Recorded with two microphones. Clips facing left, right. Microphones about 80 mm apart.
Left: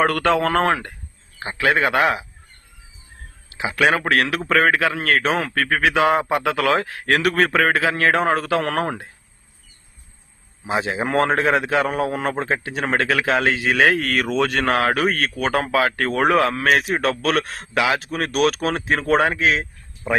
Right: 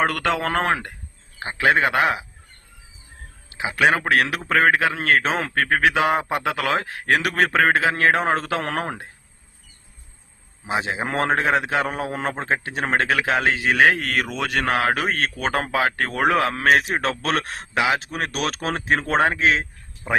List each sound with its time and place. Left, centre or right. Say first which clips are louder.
0.0 s a man's voice: left 4 dB; centre
3.5 s a man's voice: left 1 dB; right
10.7 s a man's voice: left 3 dB; right
14.3 s a man's voice: left 4 dB; centre; by 19.6 s right